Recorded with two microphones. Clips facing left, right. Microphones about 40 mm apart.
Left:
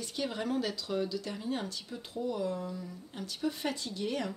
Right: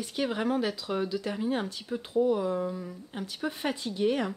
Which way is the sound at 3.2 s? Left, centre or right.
Right.